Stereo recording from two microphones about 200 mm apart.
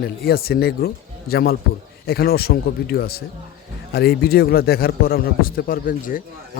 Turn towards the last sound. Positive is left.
turn(degrees=45)  # may be behind; listen again after turning